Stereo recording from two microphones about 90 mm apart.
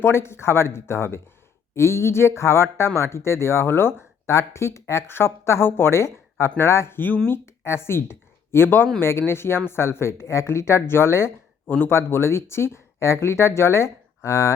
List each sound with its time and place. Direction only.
0.0 s speech: 30° left (ahead or behind)